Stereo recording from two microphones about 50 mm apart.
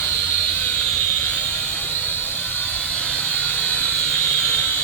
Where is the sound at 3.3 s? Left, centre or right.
Left.